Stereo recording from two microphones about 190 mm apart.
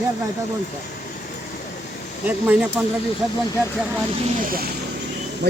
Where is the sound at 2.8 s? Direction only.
5° right (ahead or behind).